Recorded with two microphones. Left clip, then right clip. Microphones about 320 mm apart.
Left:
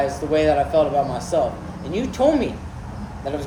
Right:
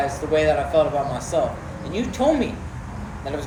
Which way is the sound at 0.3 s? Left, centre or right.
Left.